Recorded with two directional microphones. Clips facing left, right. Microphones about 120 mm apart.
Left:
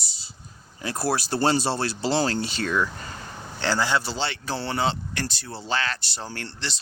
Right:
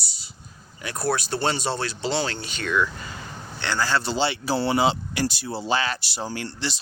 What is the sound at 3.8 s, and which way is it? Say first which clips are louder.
Speech: right 1 dB; 15° left (ahead or behind).